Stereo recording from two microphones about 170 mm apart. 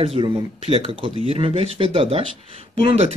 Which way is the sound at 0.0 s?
35° right (ahead or behind).